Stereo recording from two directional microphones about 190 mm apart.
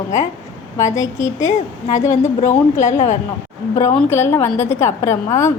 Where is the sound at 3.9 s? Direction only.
15° left (ahead or behind).